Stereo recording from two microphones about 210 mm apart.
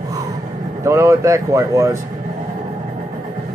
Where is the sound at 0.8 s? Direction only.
15° right (ahead or behind).